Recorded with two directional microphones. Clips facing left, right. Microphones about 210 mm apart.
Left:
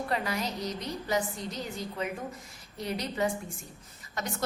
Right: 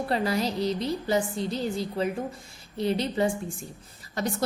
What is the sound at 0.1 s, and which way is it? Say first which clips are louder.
A woman's voice: right 8 dB; 30° right (ahead or behind).